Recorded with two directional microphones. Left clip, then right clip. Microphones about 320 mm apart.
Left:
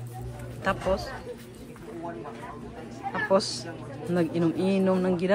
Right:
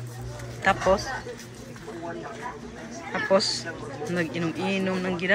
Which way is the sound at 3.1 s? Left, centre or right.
Centre.